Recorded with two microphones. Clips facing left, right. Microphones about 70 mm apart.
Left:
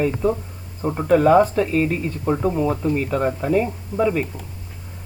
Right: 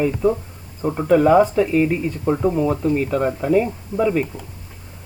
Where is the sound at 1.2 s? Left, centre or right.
Centre.